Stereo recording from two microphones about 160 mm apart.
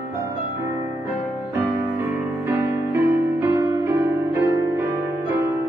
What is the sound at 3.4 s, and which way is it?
Music, 15° right (ahead or behind).